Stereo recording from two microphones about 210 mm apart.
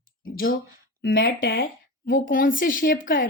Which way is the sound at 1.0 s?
50° left (ahead or behind).